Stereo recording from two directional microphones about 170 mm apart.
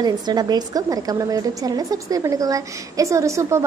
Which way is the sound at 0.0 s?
25° right (ahead or behind).